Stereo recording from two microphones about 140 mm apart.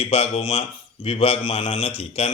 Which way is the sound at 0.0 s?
45° left (ahead or behind).